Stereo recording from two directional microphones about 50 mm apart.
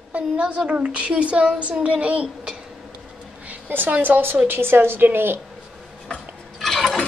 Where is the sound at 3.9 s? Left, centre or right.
Right.